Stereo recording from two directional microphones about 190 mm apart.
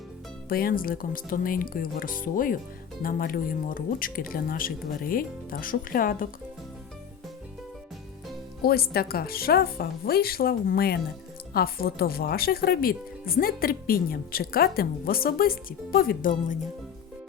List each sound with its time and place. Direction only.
0.4 s speech: 50° left (ahead or behind)
8.6 s speech: 55° left (ahead or behind)